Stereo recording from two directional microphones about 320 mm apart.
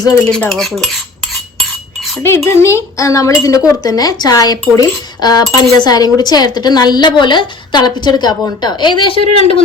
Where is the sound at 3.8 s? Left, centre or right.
Centre.